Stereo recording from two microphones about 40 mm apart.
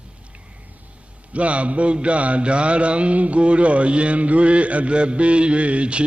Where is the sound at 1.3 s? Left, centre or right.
Right.